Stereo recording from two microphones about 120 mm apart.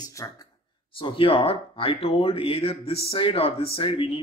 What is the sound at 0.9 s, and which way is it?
Speech, 45° left (ahead or behind).